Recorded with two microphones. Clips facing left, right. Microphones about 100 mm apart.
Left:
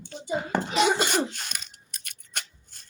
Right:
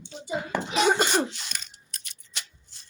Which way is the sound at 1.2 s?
50° left (ahead or behind).